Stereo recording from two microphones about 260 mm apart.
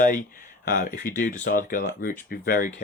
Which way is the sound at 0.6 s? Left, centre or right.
Left.